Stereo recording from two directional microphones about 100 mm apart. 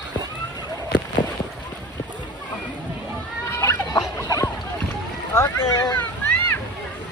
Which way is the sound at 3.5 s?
30° left (ahead or behind).